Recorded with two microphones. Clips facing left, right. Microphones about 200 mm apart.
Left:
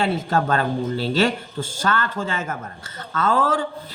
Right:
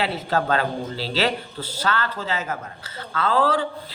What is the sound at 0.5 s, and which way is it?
Speech, 50° left (ahead or behind).